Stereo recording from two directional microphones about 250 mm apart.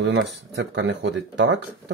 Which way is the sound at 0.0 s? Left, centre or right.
Right.